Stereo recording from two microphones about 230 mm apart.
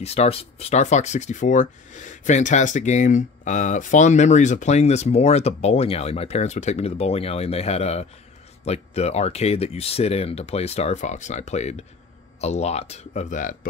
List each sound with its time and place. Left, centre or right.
0.0 s speech: left